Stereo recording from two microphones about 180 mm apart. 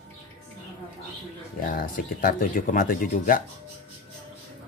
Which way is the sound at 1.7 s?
50° left (ahead or behind).